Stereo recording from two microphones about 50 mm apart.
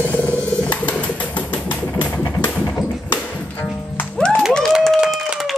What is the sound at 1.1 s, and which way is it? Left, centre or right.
Typewriter, left.